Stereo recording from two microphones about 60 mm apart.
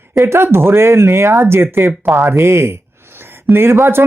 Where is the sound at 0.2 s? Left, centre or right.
Right.